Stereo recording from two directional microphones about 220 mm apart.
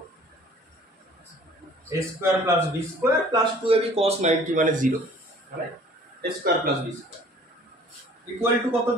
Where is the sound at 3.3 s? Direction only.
25° right (ahead or behind).